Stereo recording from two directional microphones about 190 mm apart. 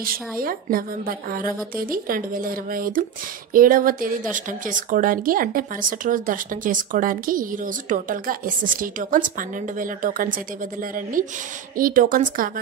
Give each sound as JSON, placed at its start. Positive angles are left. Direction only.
{"t": 0.0, "sound": "speech", "side_deg": -50}